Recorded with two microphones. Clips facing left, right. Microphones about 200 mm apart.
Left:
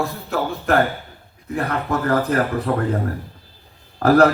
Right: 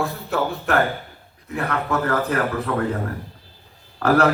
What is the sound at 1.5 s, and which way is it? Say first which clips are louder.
A man's voice: left 1 dB; 35° left (ahead or behind).